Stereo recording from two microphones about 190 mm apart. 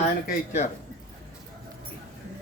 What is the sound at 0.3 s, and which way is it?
Speech, 40° left (ahead or behind).